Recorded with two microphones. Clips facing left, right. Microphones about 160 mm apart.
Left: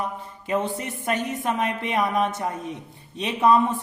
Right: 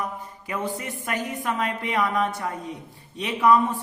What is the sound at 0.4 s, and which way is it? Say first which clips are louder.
A woman's voice: left 4 dB; 25° left (ahead or behind).